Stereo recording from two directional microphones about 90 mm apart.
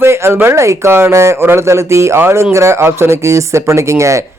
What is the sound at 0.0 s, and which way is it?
Speech, 30° right (ahead or behind).